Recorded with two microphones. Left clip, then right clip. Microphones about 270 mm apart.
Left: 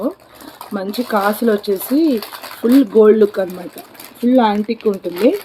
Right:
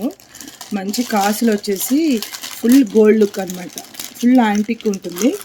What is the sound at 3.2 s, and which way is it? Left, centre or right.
Speech, right.